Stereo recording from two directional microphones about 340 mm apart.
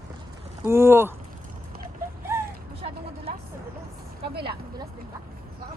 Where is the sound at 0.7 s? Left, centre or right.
Centre.